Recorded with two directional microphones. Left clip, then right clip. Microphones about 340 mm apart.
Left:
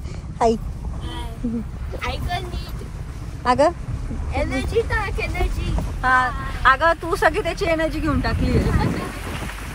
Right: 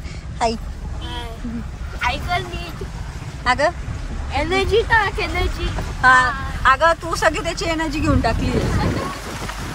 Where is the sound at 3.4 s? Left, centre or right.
Centre.